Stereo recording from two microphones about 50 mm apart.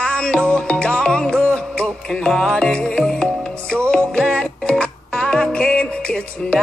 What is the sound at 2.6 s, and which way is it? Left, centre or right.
Music, centre.